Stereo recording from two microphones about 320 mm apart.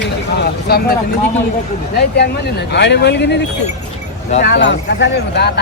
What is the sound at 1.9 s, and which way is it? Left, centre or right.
Speech, left.